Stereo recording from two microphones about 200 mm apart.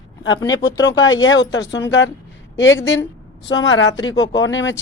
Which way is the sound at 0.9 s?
75° left (ahead or behind).